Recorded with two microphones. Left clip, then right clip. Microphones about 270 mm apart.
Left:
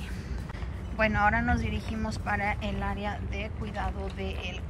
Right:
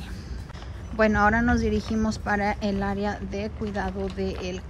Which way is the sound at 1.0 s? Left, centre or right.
Centre.